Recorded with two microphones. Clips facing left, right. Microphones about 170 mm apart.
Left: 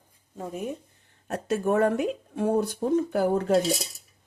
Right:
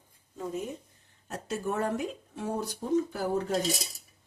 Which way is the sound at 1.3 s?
60° left (ahead or behind).